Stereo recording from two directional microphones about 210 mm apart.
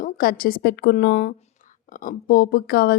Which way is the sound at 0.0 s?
45° left (ahead or behind).